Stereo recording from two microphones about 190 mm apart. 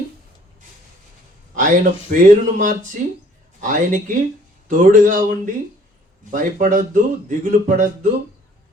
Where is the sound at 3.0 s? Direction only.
40° right (ahead or behind).